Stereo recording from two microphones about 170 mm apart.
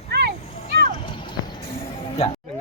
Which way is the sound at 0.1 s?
70° right (ahead or behind).